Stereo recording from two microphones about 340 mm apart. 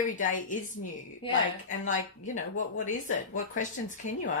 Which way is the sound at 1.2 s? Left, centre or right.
Left.